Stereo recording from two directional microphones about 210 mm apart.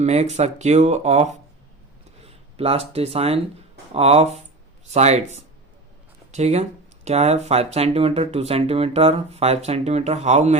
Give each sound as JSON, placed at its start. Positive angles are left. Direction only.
{"t": 0.0, "sound": "speech", "side_deg": -30}